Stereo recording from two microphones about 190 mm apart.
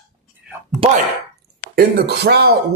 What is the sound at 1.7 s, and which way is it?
Speech, 55° right (ahead or behind).